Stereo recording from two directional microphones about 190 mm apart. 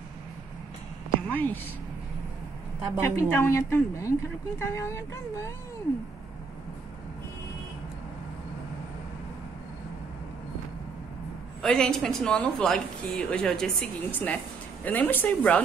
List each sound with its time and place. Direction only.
1.2 s a sound: 10° left (ahead or behind)
3.0 s a woman's voice: 10° left (ahead or behind)
11.6 s a woman's voice: 5° left (ahead or behind)